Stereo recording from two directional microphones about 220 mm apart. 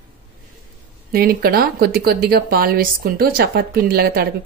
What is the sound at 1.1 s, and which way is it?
Speech, 45° right (ahead or behind).